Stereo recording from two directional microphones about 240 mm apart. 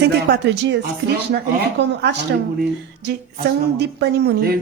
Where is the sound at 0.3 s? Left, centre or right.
Right.